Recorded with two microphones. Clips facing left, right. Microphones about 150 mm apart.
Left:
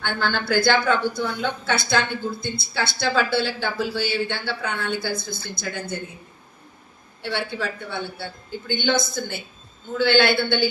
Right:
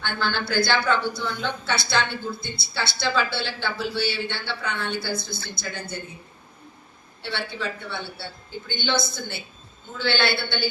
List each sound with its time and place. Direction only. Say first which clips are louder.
0.0 s a woman's voice: left 2 dB; 50° left (ahead or behind)
7.3 s a woman's voice: left 3 dB; 50° left (ahead or behind)